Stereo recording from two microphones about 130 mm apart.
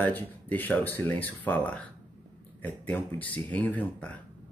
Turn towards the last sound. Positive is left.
turn(degrees=10)  # may be behind; listen again after turning